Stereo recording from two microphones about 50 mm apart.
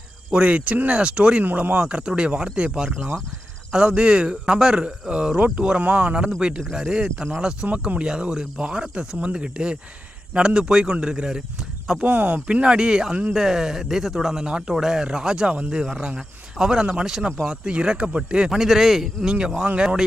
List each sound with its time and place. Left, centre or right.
0.3 s speech: right
1.6 s speech: right
1.9 s speech: right
5.8 s speech: right
6.7 s speech: centre
12.0 s speech: right
12.5 s speech: centre
17.5 s speech: right
18.6 s speech: centre
19.3 s speech: centre